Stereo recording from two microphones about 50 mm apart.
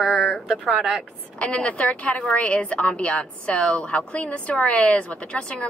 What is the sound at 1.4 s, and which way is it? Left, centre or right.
A woman's voice, left.